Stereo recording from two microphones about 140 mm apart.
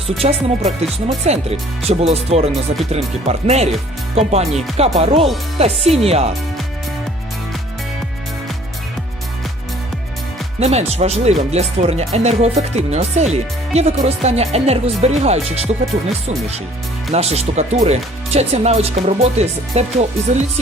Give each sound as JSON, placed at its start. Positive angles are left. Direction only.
{"t": 0.2, "sound": "speech", "side_deg": -50}
{"t": 10.6, "sound": "speech", "side_deg": -50}
{"t": 17.1, "sound": "speech", "side_deg": -50}